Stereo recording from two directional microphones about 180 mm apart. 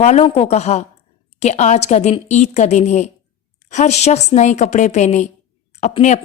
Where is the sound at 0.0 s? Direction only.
35° left (ahead or behind).